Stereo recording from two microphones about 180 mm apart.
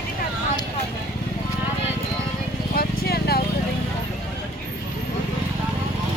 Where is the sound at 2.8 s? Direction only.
60° left (ahead or behind).